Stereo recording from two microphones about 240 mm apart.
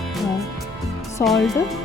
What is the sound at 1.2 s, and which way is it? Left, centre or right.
Speech, centre.